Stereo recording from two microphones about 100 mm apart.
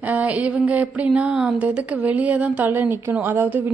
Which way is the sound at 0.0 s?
15° right (ahead or behind).